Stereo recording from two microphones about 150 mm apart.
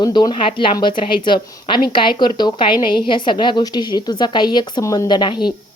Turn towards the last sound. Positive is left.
turn(degrees=30)  # may be behind; listen again after turning